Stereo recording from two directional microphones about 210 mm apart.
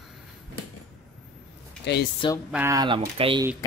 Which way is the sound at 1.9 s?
55° left (ahead or behind).